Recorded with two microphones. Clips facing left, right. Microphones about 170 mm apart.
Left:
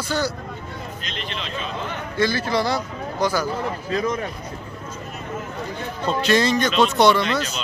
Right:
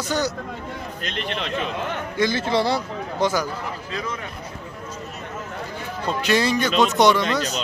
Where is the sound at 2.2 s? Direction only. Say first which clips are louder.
Even; 20° right (ahead or behind).